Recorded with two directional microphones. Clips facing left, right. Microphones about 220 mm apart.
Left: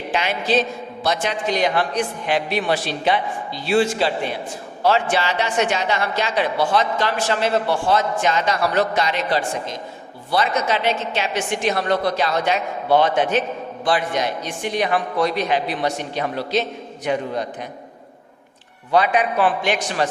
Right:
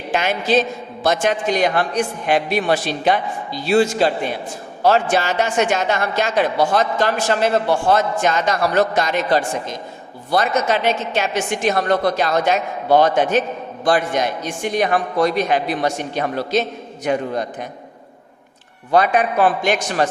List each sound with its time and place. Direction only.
0.1 s a woman's voice: 45° right (ahead or behind)
18.9 s a woman's voice: 45° right (ahead or behind)